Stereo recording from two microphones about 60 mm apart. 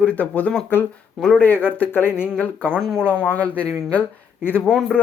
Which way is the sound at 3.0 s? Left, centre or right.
Left.